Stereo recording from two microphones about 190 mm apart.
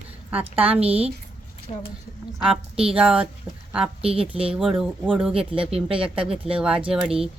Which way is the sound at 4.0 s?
30° right (ahead or behind).